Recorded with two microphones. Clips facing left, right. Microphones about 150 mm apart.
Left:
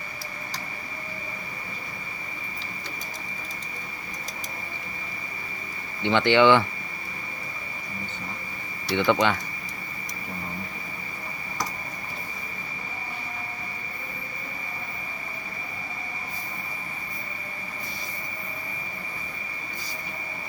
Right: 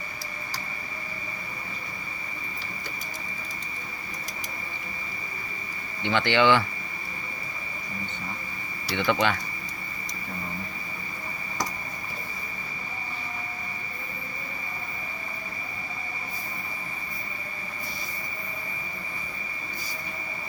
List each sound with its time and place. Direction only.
6.0 s speech: 20° left (ahead or behind)
8.9 s speech: 20° left (ahead or behind)